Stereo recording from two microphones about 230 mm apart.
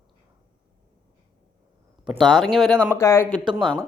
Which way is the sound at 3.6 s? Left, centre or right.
Centre.